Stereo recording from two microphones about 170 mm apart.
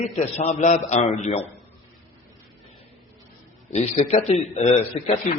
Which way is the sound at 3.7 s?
40° left (ahead or behind).